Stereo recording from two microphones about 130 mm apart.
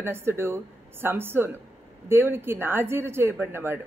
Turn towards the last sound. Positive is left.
turn(degrees=-15)  # may be behind; listen again after turning